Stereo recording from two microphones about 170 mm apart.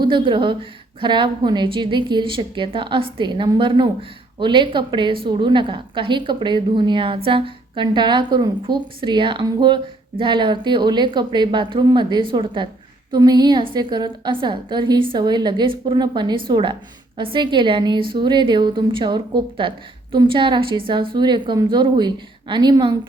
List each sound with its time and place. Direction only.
0.0 s a woman's voice: 30° right (ahead or behind)